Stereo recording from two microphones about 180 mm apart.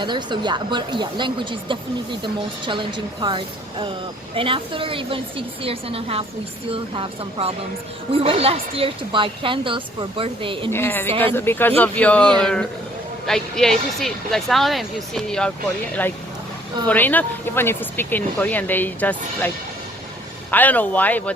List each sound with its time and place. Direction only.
0.0 s speech: 25° right (ahead or behind)
10.7 s speech: 10° left (ahead or behind)
20.5 s speech: 10° left (ahead or behind)